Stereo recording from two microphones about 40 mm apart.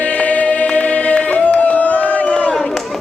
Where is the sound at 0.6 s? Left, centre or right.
Left.